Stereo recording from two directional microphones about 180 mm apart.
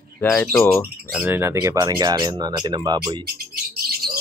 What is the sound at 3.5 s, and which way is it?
Bird, 55° right (ahead or behind).